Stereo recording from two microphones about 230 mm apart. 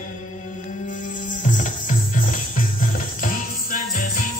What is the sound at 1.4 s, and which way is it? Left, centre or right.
Music, left.